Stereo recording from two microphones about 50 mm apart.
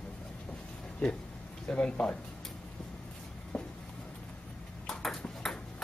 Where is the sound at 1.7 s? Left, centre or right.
Centre.